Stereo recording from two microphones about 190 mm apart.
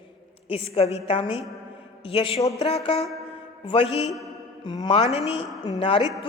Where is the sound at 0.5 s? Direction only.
30° left (ahead or behind).